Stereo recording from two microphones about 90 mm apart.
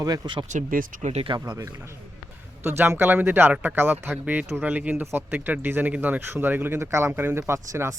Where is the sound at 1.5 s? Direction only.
35° right (ahead or behind).